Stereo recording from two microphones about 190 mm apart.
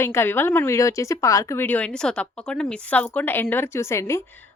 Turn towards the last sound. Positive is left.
turn(degrees=15)  # may be behind; listen again after turning